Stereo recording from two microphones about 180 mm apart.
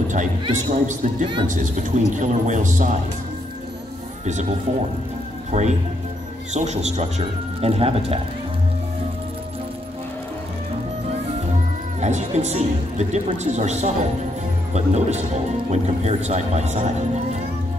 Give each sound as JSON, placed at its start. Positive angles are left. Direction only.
{"t": 0.1, "sound": "speech", "side_deg": -45}
{"t": 1.2, "sound": "speech", "side_deg": -25}
{"t": 1.5, "sound": "speech", "side_deg": -45}
{"t": 5.5, "sound": "a man's voice", "side_deg": -40}
{"t": 12.0, "sound": "a man's voice", "side_deg": -40}